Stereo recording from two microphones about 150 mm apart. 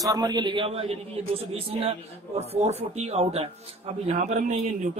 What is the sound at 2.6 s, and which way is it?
A man's voice, 45° right (ahead or behind).